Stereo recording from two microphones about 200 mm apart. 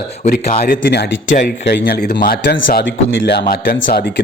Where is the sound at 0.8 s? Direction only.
55° left (ahead or behind).